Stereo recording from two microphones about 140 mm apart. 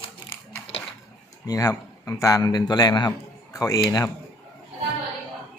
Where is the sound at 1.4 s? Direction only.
25° left (ahead or behind).